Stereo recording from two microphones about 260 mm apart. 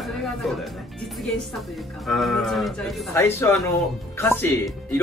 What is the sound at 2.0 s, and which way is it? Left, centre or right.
A man's voice, centre.